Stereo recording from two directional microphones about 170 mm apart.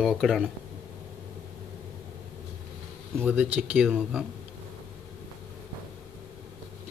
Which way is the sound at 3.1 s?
10° right (ahead or behind).